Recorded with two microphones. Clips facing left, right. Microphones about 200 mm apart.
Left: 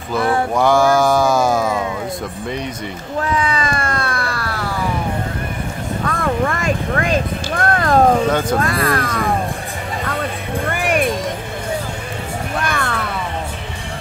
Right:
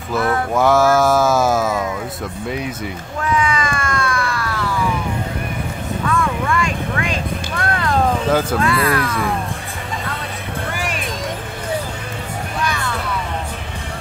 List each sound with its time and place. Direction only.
0.2 s mantra: 30° left (ahead or behind)
0.5 s music: centre (ahead or behind)
3.2 s a sound: 35° left (ahead or behind)
6.0 s vehicle: 45° left (ahead or behind)
8.3 s speech: 5° right (ahead or behind)
8.5 s speech: 45° left (ahead or behind)
10.7 s music: 55° left (ahead or behind)
12.5 s music: 55° left (ahead or behind)